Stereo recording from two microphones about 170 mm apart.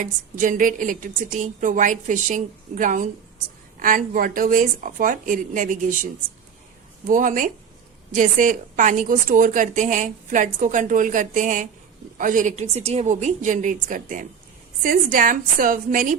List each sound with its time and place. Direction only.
0.0 s a woman's voice: 50° right (ahead or behind)
7.1 s a woman's voice: 50° right (ahead or behind)